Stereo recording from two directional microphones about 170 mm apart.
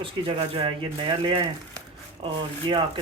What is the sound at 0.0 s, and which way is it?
Speech, 30° right (ahead or behind).